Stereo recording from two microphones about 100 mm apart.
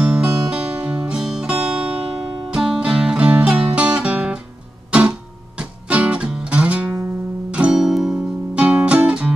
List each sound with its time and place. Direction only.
0.0 s music: 10° right (ahead or behind)